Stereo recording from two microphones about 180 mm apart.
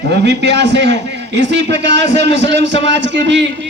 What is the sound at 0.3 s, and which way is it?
A man's voice, 70° right (ahead or behind).